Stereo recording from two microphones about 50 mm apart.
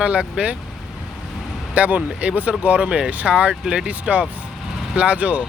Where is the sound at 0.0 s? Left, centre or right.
Right.